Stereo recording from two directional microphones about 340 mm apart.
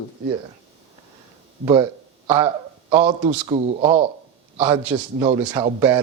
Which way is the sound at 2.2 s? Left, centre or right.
Centre.